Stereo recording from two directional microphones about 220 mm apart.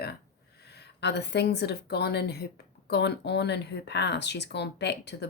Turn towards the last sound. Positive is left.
turn(degrees=50)  # may be behind; listen again after turning